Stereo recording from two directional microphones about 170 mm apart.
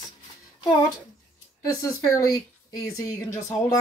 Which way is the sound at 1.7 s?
20° left (ahead or behind).